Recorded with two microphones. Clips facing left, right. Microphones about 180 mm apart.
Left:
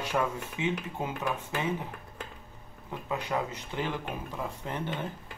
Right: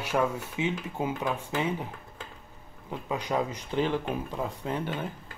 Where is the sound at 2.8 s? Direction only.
15° right (ahead or behind).